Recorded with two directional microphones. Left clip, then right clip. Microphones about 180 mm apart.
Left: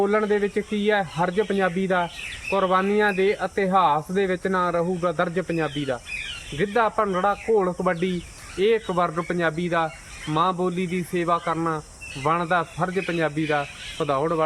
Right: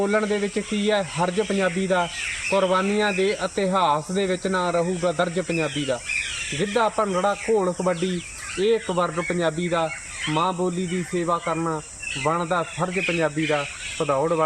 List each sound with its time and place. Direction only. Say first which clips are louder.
0.0 s speech: left 1 dB; 5° left (ahead or behind)
12.9 s speech: right 2 dB; 25° left (ahead or behind)